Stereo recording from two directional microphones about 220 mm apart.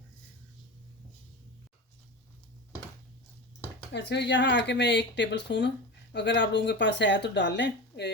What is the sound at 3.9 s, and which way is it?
Speech, 50° left (ahead or behind).